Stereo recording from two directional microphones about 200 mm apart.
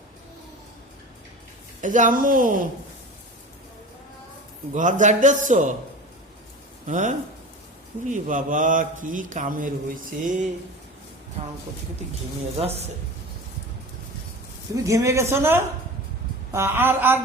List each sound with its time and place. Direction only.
1.8 s a woman's voice: 40° right (ahead or behind)
4.7 s a man's voice: 40° right (ahead or behind)
6.8 s a man's voice: 40° right (ahead or behind)
11.4 s speech: 30° right (ahead or behind)
12.5 s a man's voice: 30° right (ahead or behind)
14.8 s speech: 15° right (ahead or behind)